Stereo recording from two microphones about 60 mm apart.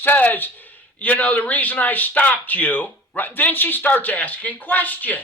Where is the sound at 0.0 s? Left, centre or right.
Left.